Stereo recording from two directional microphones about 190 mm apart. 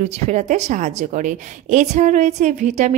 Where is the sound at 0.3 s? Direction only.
35° right (ahead or behind).